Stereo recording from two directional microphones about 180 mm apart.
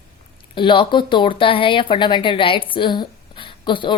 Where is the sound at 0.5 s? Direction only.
25° left (ahead or behind).